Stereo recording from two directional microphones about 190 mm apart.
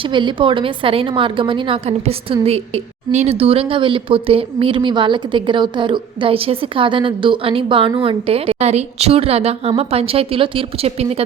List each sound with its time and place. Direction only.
0.0 s a woman's voice: 25° right (ahead or behind)